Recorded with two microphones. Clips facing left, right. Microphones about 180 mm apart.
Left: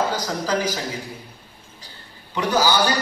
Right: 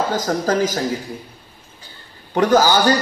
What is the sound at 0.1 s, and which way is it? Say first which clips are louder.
Speech: right 5 dB; 50° right (ahead or behind).